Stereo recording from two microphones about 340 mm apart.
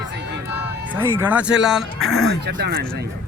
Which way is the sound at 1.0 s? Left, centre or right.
Centre.